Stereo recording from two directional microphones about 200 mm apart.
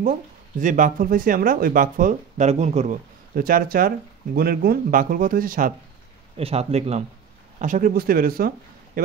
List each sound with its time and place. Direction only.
0.0 s speech: 40° right (ahead or behind)
6.3 s speech: 30° right (ahead or behind); by 9.0 s 45° right (ahead or behind)